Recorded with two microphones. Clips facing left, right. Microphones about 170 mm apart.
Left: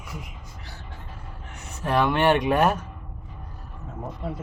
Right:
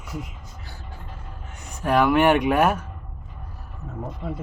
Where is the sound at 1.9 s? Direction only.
10° right (ahead or behind).